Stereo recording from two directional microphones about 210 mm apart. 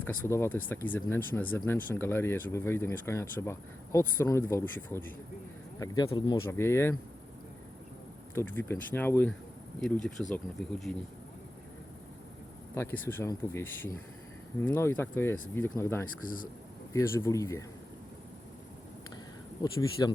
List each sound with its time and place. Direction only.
0.0 s speech: 10° left (ahead or behind)
8.4 s speech: 10° left (ahead or behind)
12.7 s speech: 10° left (ahead or behind)
16.2 s speech: 40° left (ahead or behind)
16.9 s speech: 15° left (ahead or behind)
19.7 s speech: 20° left (ahead or behind)